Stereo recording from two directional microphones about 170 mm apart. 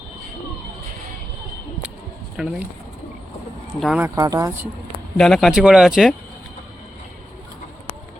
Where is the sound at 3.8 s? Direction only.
Centre (ahead or behind).